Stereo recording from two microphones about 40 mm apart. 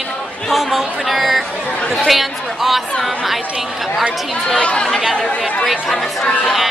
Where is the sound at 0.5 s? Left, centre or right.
Centre.